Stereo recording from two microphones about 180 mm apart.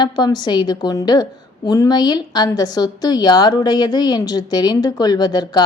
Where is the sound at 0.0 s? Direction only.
25° left (ahead or behind).